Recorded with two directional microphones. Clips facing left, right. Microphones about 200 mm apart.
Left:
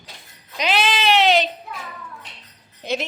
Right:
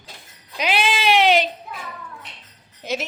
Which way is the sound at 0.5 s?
10° right (ahead or behind).